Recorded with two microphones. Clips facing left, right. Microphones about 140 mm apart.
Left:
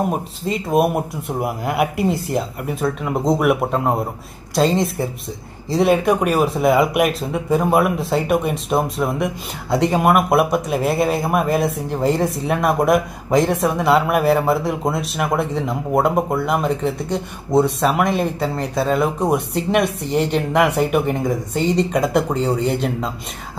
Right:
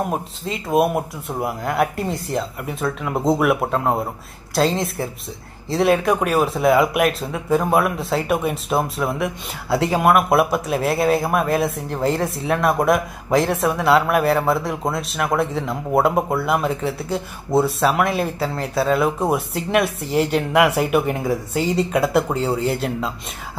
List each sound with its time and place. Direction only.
0.5 s speech: centre (ahead or behind)